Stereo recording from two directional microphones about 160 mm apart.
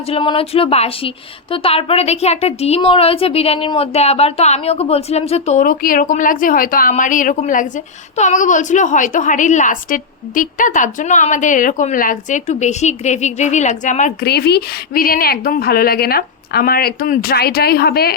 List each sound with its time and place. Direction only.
0.1 s a woman's voice: 35° left (ahead or behind); by 14.3 s 50° left (ahead or behind)
14.3 s a woman's voice: 85° left